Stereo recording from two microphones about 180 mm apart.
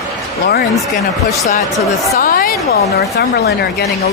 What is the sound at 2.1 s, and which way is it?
A woman's voice, 50° left (ahead or behind).